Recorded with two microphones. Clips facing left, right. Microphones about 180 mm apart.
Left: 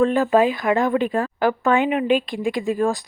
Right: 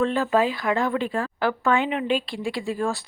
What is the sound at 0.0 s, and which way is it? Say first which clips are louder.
A woman's voice: left 5 dB; 15° left (ahead or behind).